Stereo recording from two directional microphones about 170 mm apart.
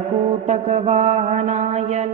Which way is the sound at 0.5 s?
40° right (ahead or behind).